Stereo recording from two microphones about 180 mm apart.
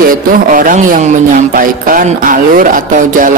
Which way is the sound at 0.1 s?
50° right (ahead or behind).